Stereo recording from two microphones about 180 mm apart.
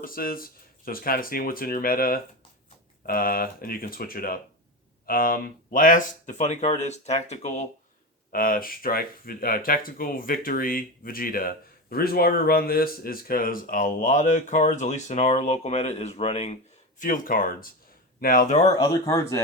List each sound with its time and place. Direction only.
0.0 s speech: 55° left (ahead or behind)
8.3 s speech: 50° left (ahead or behind); by 16.6 s 35° left (ahead or behind)
17.0 s speech: 50° left (ahead or behind)
18.8 s speech: 20° left (ahead or behind)